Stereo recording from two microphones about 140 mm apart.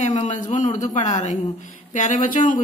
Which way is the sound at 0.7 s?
55° left (ahead or behind).